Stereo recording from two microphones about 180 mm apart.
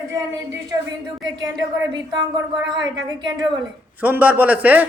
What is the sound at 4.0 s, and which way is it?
Speech, 10° right (ahead or behind).